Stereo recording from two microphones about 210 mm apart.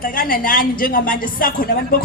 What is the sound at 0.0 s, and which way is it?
Speech, 40° left (ahead or behind).